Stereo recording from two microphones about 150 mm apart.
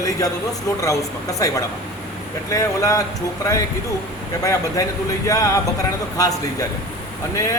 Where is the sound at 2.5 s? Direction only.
20° left (ahead or behind).